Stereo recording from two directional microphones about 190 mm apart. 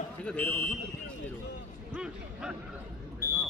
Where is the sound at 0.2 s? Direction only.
5° left (ahead or behind).